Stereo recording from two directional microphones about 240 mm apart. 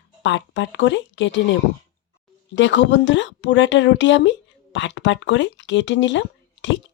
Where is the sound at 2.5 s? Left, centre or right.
Left.